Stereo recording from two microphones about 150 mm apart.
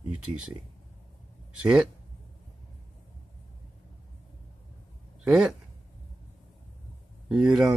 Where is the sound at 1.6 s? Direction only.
5° right (ahead or behind).